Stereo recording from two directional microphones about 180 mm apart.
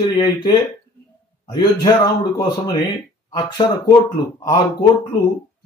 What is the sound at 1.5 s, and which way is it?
Speech, 20° left (ahead or behind).